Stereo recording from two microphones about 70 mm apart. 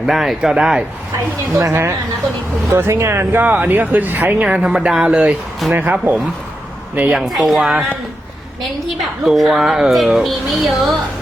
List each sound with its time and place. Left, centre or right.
0.0 s speech: centre
1.5 s speech: right
3.5 s speech: right
4.4 s speech: centre
5.7 s speech: right
7.1 s a woman's voice: centre
8.9 s a woman's voice: centre